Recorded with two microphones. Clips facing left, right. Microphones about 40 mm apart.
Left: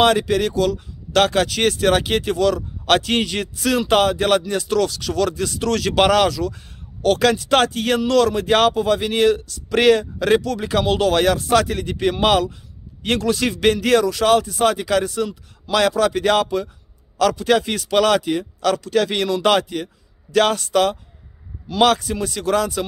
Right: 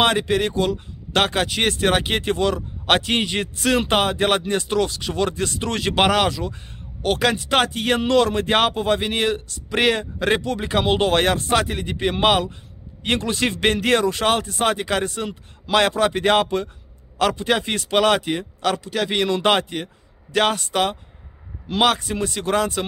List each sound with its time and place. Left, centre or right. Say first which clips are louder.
0.0 s speech: left 2 dB; right
11.5 s a man's voice: left 3 dB; right
19.2 s a man's voice: left 2 dB; right